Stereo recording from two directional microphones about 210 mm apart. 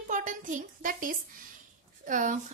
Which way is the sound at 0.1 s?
35° right (ahead or behind).